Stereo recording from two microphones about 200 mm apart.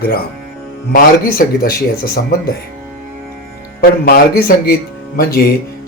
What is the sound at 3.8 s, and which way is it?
Speech, 50° left (ahead or behind).